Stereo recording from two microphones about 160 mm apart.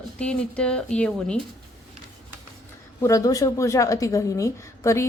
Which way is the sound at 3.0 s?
20° left (ahead or behind).